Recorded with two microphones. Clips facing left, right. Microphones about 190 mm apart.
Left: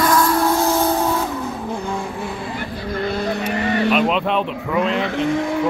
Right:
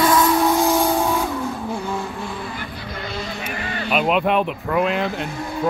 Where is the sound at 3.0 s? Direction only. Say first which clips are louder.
Left 8 dB; 60° left (ahead or behind).